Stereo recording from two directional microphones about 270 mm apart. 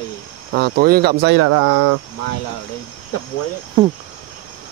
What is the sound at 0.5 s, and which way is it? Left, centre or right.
Speech, right.